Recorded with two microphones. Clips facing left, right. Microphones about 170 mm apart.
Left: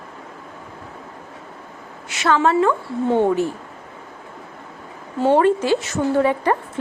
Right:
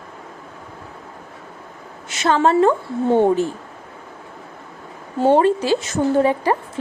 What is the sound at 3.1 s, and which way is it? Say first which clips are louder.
Speech: right 2 dB; 10° right (ahead or behind).